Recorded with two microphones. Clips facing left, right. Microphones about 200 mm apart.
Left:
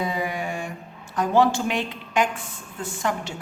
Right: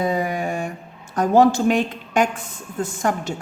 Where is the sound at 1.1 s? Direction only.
45° right (ahead or behind).